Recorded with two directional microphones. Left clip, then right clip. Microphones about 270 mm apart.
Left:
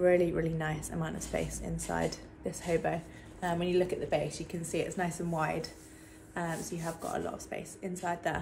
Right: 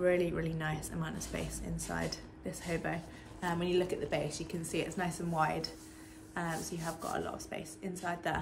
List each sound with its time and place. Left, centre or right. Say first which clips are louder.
0.0 s a woman's voice: left 4 dB; centre